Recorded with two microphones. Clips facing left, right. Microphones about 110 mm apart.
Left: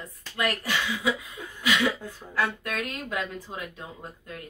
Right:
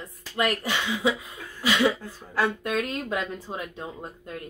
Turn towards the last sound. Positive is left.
turn(degrees=-25)  # may be behind; listen again after turning